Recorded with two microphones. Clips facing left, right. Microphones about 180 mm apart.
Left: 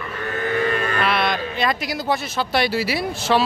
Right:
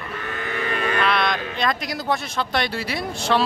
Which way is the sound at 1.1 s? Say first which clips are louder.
Left 1 dB; 5° left (ahead or behind).